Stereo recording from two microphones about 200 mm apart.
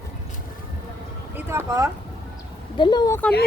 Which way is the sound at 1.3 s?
10° right (ahead or behind).